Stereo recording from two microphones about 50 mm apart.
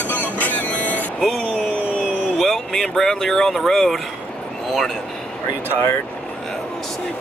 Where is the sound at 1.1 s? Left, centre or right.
Centre.